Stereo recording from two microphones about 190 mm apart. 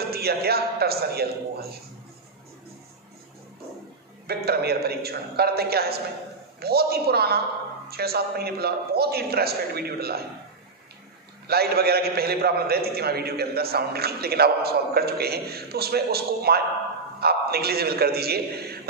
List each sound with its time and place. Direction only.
0.1 s a man's voice: 55° right (ahead or behind)
4.3 s a man's voice: 55° right (ahead or behind)
11.4 s a man's voice: 55° right (ahead or behind)